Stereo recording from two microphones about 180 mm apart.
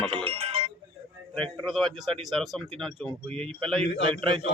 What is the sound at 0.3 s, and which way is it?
Sheep, 30° right (ahead or behind).